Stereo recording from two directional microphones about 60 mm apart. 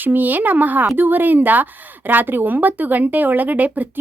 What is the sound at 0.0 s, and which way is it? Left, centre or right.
A woman's voice, right.